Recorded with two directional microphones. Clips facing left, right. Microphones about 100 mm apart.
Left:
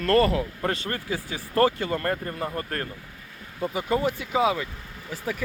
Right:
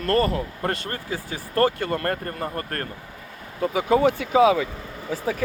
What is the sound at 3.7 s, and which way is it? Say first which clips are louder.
Speech: right 6 dB; 90° right.